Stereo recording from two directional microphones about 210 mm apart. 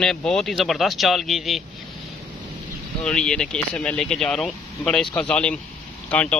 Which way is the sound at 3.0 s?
5° left (ahead or behind).